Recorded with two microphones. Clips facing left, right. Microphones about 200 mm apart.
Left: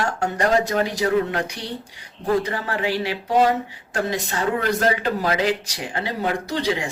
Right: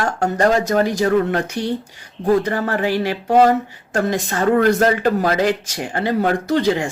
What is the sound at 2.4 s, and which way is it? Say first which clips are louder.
Speech: right 5 dB; 45° right (ahead or behind).